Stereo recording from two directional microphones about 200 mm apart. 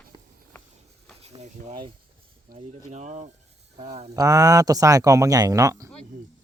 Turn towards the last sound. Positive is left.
turn(degrees=-15)  # may be behind; listen again after turning